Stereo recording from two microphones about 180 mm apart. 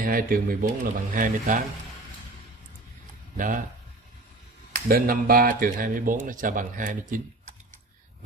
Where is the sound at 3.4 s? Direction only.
45° right (ahead or behind).